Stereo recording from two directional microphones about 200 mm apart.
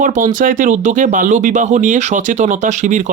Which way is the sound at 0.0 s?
40° right (ahead or behind).